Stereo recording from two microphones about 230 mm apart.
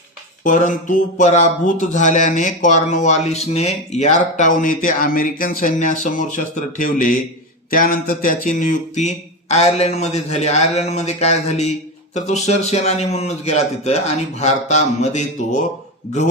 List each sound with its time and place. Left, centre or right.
0.4 s speech: left